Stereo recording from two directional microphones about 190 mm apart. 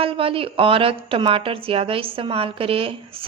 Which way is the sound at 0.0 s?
30° right (ahead or behind).